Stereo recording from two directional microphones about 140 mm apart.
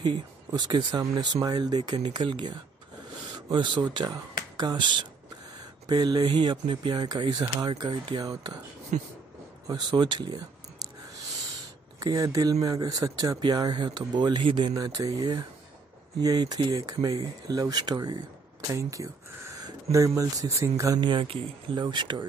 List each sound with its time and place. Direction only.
0.0 s speech: 30° right (ahead or behind)
8.9 s speech: 70° right (ahead or behind)
9.7 s speech: 30° right (ahead or behind)
12.0 s speech: 25° right (ahead or behind)
14.7 s speech: 25° right (ahead or behind)
21.0 s speech: 35° right (ahead or behind)